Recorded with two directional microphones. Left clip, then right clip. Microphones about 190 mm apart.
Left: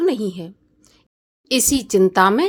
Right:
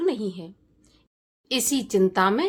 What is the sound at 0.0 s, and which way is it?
A woman's voice, 30° left (ahead or behind).